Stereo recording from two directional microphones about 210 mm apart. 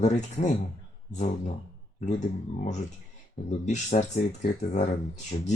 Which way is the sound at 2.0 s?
35° left (ahead or behind).